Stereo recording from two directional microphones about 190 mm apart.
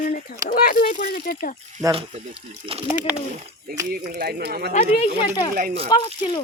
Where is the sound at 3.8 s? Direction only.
50° right (ahead or behind).